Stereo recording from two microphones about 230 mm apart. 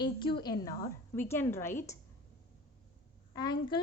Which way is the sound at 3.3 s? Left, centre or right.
Centre.